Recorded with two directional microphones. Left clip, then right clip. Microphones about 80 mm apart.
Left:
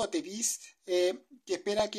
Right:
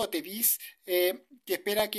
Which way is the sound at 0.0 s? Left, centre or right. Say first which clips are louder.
Even; right.